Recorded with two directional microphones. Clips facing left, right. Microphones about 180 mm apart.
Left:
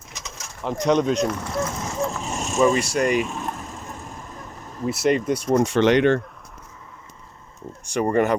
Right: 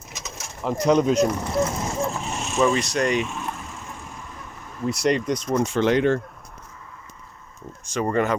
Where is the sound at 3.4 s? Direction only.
40° left (ahead or behind).